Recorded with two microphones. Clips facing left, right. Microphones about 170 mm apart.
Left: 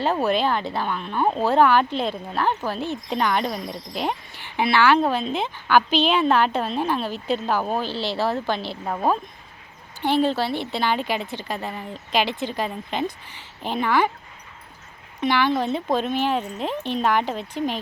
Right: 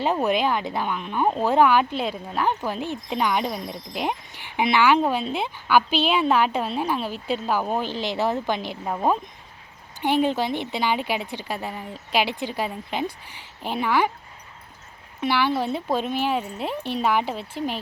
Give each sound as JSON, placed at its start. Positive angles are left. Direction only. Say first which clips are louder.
{"t": 0.0, "sound": "speech", "louder": "left 1 dB", "side_deg": -15}
{"t": 15.2, "sound": "speech", "louder": "left 2 dB", "side_deg": -10}